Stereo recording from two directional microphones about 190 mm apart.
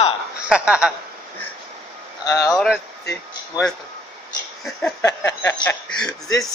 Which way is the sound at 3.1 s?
15° left (ahead or behind).